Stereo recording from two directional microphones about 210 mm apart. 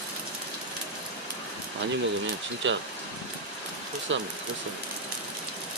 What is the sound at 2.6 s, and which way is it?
Speech, 60° right (ahead or behind).